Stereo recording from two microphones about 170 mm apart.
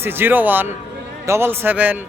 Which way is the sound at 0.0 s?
15° right (ahead or behind).